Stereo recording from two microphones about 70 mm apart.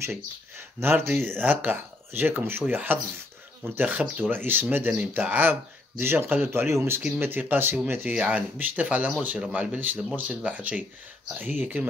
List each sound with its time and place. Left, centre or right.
0.0 s speech: right